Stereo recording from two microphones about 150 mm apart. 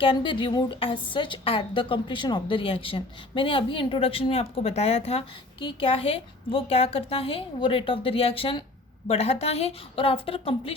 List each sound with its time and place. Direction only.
0.0 s a woman's voice: 35° left (ahead or behind)